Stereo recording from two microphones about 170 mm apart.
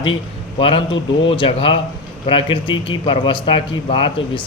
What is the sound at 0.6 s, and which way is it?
Speech, 30° left (ahead or behind).